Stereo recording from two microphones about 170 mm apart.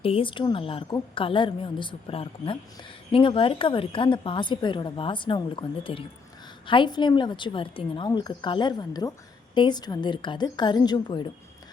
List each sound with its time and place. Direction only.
0.0 s a woman's voice: 30° left (ahead or behind)